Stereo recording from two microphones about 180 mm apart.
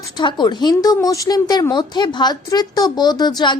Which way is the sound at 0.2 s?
25° left (ahead or behind).